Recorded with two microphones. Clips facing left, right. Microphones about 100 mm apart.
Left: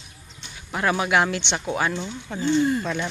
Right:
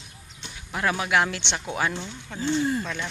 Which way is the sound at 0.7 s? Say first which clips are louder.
Left 3 dB; 5° left (ahead or behind).